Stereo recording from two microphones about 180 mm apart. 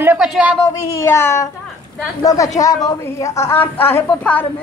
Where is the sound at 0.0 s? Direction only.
5° right (ahead or behind).